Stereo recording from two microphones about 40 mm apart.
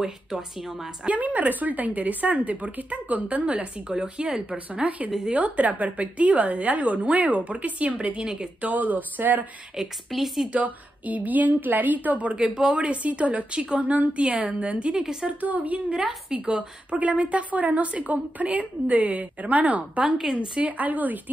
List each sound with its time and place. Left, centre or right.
0.0 s speech: centre
1.0 s a woman's voice: right
4.8 s a woman's voice: right
8.2 s speech: right
8.5 s a woman's voice: right
9.8 s a woman's voice: centre
10.5 s a woman's voice: right
12.6 s a woman's voice: right
15.0 s speech: centre
15.4 s a woman's voice: right
16.4 s a woman's voice: right